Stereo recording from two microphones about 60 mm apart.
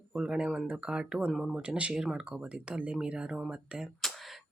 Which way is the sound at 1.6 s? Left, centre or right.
Centre.